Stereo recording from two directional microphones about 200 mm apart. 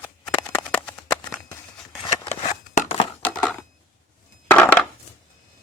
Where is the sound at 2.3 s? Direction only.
35° left (ahead or behind).